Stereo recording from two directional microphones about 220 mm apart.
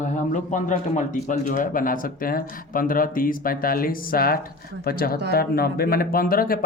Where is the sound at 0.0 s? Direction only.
35° left (ahead or behind).